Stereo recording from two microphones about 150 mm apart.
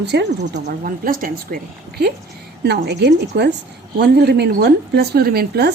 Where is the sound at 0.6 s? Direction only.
70° right (ahead or behind).